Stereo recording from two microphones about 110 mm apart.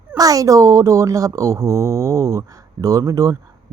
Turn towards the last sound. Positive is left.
turn(degrees=-30)  # may be behind; listen again after turning